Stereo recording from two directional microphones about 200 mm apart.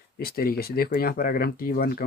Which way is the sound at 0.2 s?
50° left (ahead or behind).